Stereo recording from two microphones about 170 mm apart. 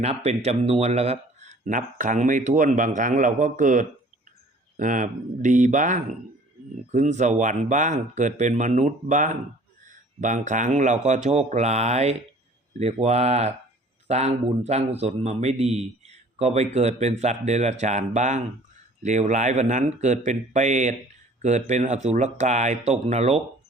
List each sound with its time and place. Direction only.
0.0 s a man's voice: 40° right (ahead or behind)